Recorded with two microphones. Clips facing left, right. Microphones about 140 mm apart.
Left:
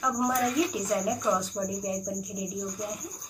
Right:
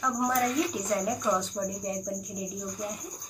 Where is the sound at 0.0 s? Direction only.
5° left (ahead or behind).